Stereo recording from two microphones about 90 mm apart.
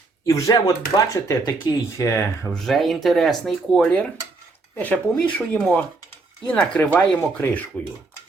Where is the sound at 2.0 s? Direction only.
30° left (ahead or behind).